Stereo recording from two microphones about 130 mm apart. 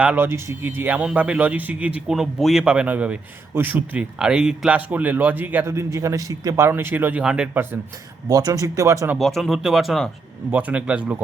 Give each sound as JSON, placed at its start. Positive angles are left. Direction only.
{"t": 0.0, "sound": "speech", "side_deg": -10}
{"t": 0.3, "sound": "speech", "side_deg": -20}
{"t": 8.3, "sound": "speech", "side_deg": -30}
{"t": 9.1, "sound": "speech", "side_deg": 0}
{"t": 10.5, "sound": "speech", "side_deg": -10}